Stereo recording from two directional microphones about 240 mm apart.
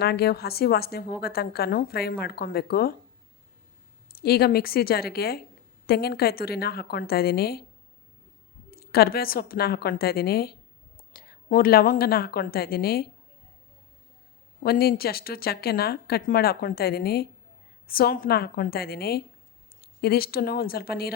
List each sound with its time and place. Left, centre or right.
0.0 s speech: left
4.1 s speech: left
8.7 s a woman's voice: left
14.6 s speech: left